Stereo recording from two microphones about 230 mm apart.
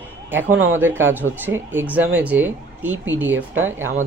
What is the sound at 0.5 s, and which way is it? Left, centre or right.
Speech, right.